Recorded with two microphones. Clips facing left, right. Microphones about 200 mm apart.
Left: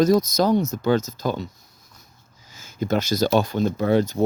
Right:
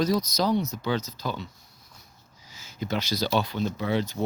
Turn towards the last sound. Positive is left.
turn(degrees=45)  # may be behind; listen again after turning